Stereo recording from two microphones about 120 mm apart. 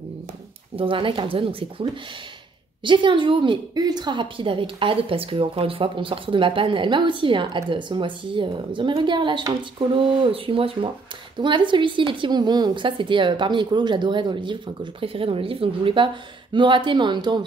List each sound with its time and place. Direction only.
0.7 s a woman's voice: 45° right (ahead or behind)